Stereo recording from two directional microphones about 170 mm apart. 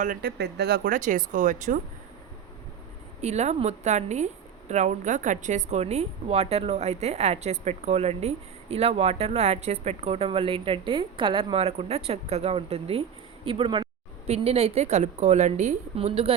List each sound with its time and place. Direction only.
0.0 s speech: 55° right (ahead or behind)
0.9 s speech: 50° right (ahead or behind)
3.2 s a woman's voice: 40° right (ahead or behind)